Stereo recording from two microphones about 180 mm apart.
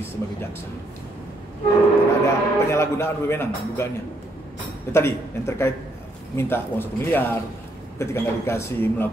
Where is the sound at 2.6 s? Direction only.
15° left (ahead or behind).